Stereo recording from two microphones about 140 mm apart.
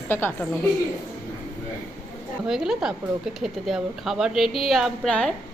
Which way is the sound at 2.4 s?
5° right (ahead or behind).